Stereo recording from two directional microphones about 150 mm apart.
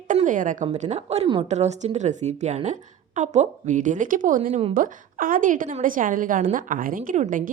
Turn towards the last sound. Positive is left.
turn(degrees=-65)  # may be behind; listen again after turning